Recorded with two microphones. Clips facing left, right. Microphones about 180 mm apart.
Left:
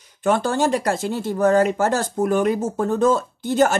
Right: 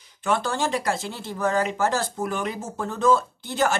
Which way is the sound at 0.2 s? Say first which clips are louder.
Left 6 dB; 50° left (ahead or behind).